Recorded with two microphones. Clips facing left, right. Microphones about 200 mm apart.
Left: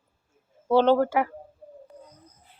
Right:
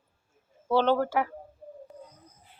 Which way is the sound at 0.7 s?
15° left (ahead or behind).